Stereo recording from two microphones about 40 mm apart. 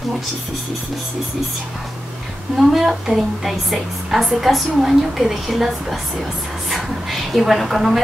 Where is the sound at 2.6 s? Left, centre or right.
Centre.